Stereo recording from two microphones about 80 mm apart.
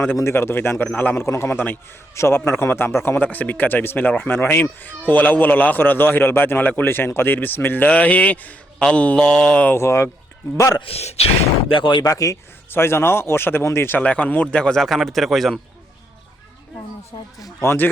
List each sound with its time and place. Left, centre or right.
0.2 s speech: left
1.1 s speech: left; by 9.6 s centre
9.7 s speech: left
11.7 s speech: left
12.0 s speech: left
12.7 s speech: left
14.0 s speech: centre
14.8 s a man's voice: centre
17.6 s speech: left